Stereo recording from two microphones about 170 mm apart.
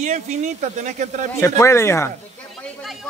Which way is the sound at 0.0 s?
45° right (ahead or behind).